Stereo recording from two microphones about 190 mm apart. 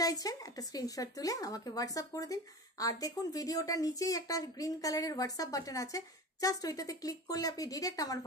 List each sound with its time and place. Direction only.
0.0 s speech: 20° left (ahead or behind)